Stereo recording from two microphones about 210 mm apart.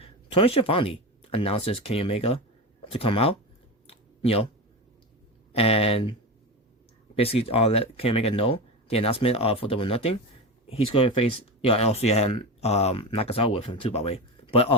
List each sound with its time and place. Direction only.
0.0 s speech: 25° left (ahead or behind)
3.8 s a sound: 25° left (ahead or behind)
5.5 s speech: 30° left (ahead or behind)
7.2 s speech: 25° left (ahead or behind)